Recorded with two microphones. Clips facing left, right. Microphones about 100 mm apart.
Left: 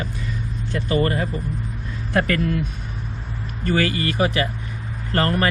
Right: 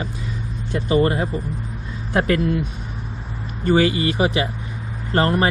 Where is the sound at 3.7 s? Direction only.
20° right (ahead or behind).